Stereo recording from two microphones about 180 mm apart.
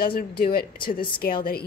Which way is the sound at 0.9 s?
25° left (ahead or behind).